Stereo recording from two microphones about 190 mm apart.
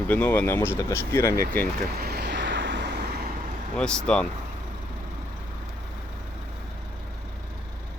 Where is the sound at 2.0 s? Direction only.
55° right (ahead or behind).